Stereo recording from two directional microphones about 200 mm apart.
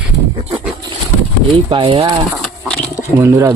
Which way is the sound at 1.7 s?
25° right (ahead or behind).